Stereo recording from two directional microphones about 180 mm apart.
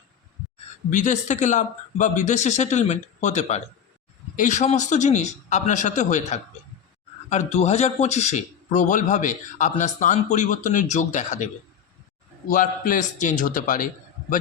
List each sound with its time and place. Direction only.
0.9 s speech: 45° left (ahead or behind)
12.5 s speech: 50° left (ahead or behind)